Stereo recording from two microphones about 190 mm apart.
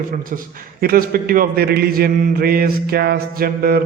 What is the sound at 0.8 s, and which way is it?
A man's voice, 50° right (ahead or behind).